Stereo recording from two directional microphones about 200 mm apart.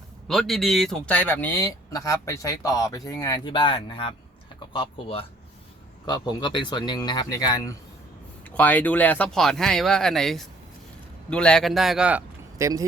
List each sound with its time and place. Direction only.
0.3 s a man's voice: centre (ahead or behind)